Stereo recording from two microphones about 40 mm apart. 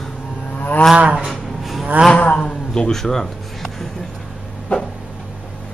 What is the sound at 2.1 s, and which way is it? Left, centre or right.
Music, left.